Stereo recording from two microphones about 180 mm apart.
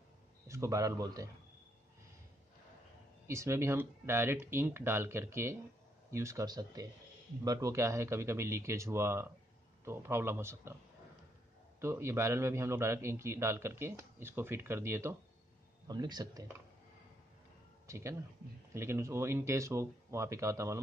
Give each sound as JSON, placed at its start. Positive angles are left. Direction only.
{"t": 0.5, "sound": "speech", "side_deg": -15}
{"t": 3.3, "sound": "a man's voice", "side_deg": -15}
{"t": 11.8, "sound": "a man's voice", "side_deg": -15}
{"t": 17.8, "sound": "a man's voice", "side_deg": -15}